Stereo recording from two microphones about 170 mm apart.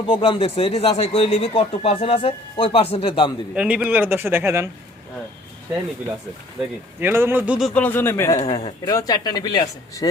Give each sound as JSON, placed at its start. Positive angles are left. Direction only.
{"t": 0.1, "sound": "speech", "side_deg": 30}
{"t": 3.5, "sound": "speech", "side_deg": -5}
{"t": 6.6, "sound": "speech", "side_deg": -15}
{"t": 7.7, "sound": "speech", "side_deg": 10}
{"t": 8.5, "sound": "speech", "side_deg": 35}
{"t": 8.9, "sound": "speech", "side_deg": 20}